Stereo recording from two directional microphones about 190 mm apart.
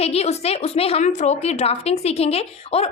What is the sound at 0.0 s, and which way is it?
A woman's voice, 35° left (ahead or behind).